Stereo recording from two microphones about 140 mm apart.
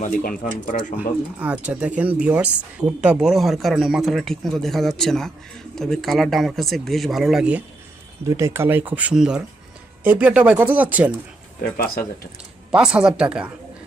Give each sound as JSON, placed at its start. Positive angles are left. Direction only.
{"t": 0.0, "sound": "speech", "side_deg": 85}
{"t": 0.9, "sound": "speech", "side_deg": -10}
{"t": 8.3, "sound": "speech", "side_deg": -20}
{"t": 11.8, "sound": "speech", "side_deg": 90}
{"t": 12.7, "sound": "speech", "side_deg": -5}